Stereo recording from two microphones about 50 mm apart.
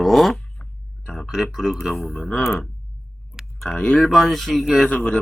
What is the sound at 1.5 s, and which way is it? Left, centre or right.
Speech, centre.